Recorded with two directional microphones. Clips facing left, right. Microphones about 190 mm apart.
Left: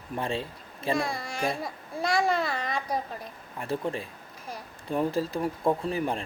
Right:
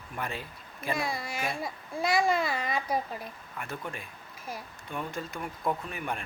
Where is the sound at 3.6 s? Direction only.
30° left (ahead or behind).